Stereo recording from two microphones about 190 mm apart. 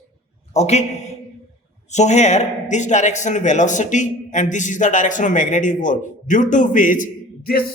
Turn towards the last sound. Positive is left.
turn(degrees=50)  # may be behind; listen again after turning